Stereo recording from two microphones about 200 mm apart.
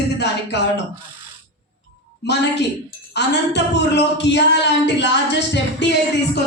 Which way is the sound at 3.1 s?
60° left (ahead or behind).